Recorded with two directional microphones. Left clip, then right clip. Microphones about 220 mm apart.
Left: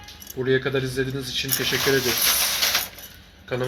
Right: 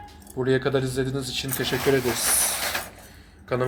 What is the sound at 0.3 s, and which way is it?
Speech, 15° right (ahead or behind).